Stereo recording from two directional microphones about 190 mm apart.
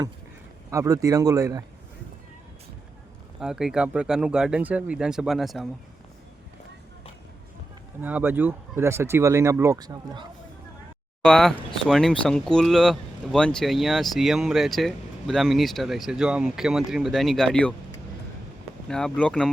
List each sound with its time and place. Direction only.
0.7 s speech: 15° right (ahead or behind)
3.4 s speech: 5° right (ahead or behind)
8.0 s speech: 10° right (ahead or behind)
11.2 s speech: 5° left (ahead or behind)
18.9 s speech: 5° left (ahead or behind)